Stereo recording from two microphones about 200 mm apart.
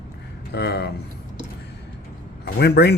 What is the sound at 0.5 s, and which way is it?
Speech, 55° left (ahead or behind).